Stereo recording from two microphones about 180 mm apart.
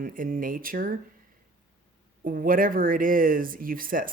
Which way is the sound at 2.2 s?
50° right (ahead or behind).